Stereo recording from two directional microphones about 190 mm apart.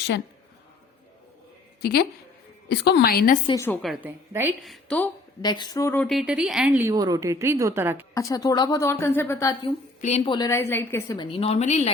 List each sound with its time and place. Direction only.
1.8 s a woman's voice: 55° left (ahead or behind)
3.4 s a woman's voice: 15° left (ahead or behind)
4.0 s a woman's voice: 10° right (ahead or behind)
4.6 s speech: 5° left (ahead or behind)
5.4 s a woman's voice: 20° left (ahead or behind); by 8.0 s 10° right (ahead or behind)
8.1 s a woman's voice: 15° left (ahead or behind)
9.6 s a woman's voice: 35° left (ahead or behind)
10.3 s a woman's voice: 15° left (ahead or behind)
11.2 s a woman's voice: 30° left (ahead or behind)